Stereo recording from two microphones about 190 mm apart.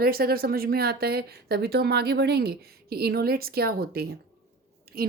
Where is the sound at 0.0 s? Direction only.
50° right (ahead or behind).